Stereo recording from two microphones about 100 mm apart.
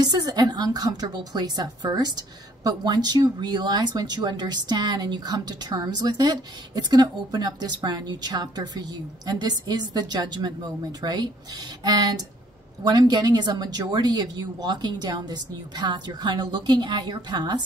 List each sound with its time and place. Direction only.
0.0 s a woman's voice: 40° right (ahead or behind)